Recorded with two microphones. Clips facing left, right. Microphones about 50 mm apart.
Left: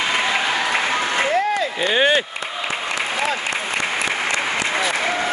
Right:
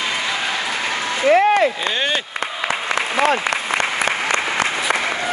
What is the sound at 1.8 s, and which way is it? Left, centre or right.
Speech, centre.